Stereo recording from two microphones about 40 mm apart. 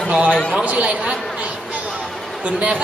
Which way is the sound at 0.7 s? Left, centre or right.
Right.